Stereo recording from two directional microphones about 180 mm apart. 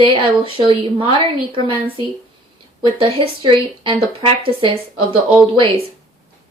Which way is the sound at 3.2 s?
30° right (ahead or behind).